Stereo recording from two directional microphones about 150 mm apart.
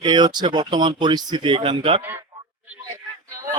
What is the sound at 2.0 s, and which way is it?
Speech, 15° right (ahead or behind).